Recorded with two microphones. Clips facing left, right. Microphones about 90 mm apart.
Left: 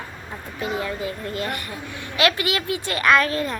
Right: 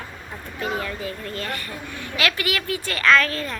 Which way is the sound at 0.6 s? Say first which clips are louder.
Left 1 dB; 20° left (ahead or behind).